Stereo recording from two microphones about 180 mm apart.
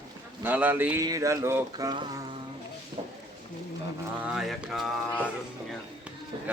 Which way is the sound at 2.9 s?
25° right (ahead or behind).